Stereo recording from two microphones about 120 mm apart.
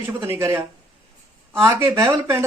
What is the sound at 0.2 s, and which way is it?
Speech, 25° right (ahead or behind).